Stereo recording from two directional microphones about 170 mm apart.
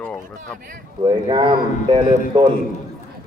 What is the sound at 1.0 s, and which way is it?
Speech, 30° right (ahead or behind).